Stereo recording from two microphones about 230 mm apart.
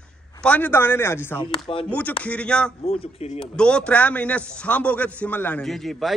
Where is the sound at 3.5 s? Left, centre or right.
Centre.